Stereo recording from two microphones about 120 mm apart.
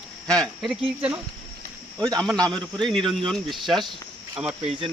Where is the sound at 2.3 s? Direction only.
10° left (ahead or behind).